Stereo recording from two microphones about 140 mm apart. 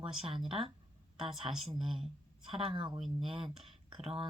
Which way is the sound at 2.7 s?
35° right (ahead or behind).